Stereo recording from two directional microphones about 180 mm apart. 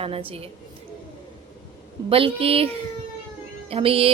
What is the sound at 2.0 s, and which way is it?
A woman's voice, 30° right (ahead or behind).